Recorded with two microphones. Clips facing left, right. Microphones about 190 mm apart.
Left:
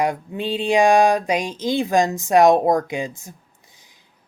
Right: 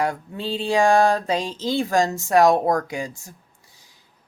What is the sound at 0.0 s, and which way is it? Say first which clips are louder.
Speech: left 3 dB; 20° left (ahead or behind).